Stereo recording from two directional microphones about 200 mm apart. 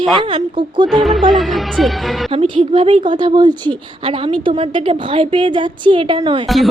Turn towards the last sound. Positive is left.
turn(degrees=0)  # may be behind; listen again after turning